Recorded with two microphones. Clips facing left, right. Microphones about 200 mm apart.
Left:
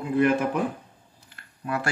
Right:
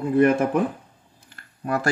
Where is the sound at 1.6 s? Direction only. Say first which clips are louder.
Right 4 dB; 40° right (ahead or behind).